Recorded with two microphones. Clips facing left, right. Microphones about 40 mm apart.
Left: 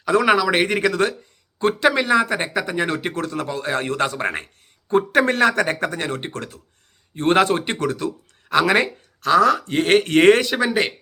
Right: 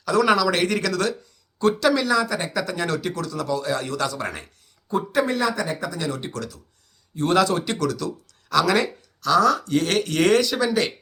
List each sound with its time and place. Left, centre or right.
0.0 s speech: left
4.9 s speech: left